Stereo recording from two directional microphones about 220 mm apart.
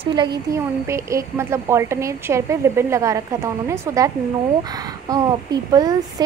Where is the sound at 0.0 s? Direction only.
20° right (ahead or behind).